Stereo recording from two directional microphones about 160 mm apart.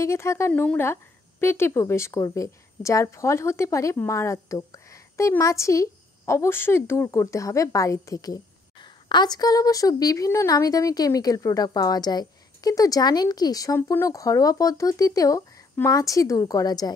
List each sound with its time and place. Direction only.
0.0 s a woman's voice: 15° left (ahead or behind)